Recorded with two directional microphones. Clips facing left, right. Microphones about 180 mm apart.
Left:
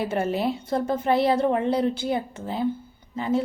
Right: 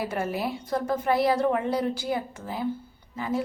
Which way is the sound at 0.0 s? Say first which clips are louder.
Left 4 dB; 25° left (ahead or behind).